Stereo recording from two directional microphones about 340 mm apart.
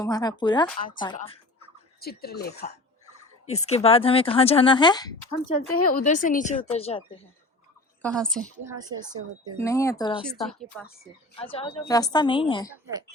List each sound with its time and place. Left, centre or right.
0.0 s speech: centre
2.0 s a woman's voice: left; by 5.4 s centre
5.7 s a woman's voice: left
8.0 s a woman's voice: centre
8.6 s a woman's voice: centre
9.6 s a woman's voice: centre
11.3 s speech: centre
12.7 s a woman's voice: centre